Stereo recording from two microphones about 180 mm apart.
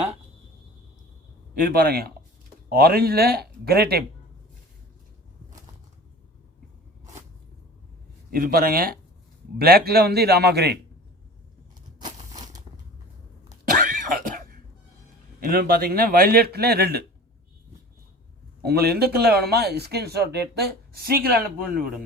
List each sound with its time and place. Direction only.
1.6 s a man's voice: 55° right (ahead or behind)
8.3 s a man's voice: 55° right (ahead or behind)
11.9 s a sound: 25° right (ahead or behind)
13.7 s cough: 50° right (ahead or behind)
15.4 s a man's voice: 55° right (ahead or behind)
18.6 s a man's voice: 60° right (ahead or behind)